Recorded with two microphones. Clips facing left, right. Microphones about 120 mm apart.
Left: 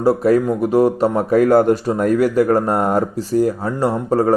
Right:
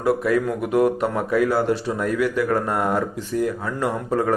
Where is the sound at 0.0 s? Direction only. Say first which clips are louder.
Left 6 dB; 35° left (ahead or behind).